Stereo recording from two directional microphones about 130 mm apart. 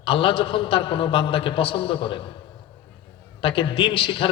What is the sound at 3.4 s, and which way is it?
Speech, 40° left (ahead or behind).